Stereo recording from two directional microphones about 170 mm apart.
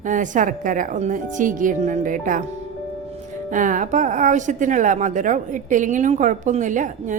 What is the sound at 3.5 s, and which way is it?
Speech, 50° right (ahead or behind).